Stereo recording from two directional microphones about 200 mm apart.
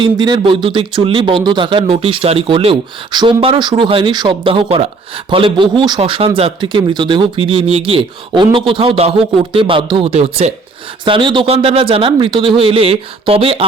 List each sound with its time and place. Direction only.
0.0 s speech: 25° right (ahead or behind)